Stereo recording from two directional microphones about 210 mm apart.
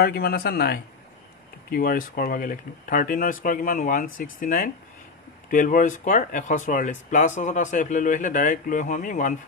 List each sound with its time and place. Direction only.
0.0 s speech: 50° left (ahead or behind)